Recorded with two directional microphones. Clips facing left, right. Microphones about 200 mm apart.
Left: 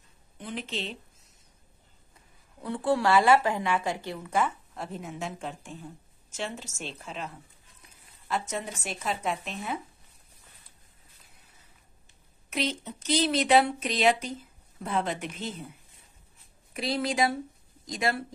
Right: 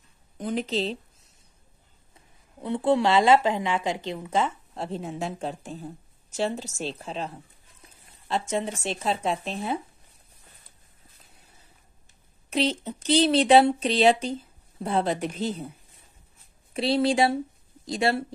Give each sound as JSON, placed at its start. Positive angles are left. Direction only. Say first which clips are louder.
{"t": 0.4, "sound": "speech", "louder": "right 8 dB", "side_deg": -40}
{"t": 2.6, "sound": "a woman's voice", "louder": "right 4 dB", "side_deg": -20}
{"t": 12.4, "sound": "speech", "louder": "right 6 dB", "side_deg": -30}
{"t": 16.7, "sound": "a woman's voice", "louder": "right 6 dB", "side_deg": -30}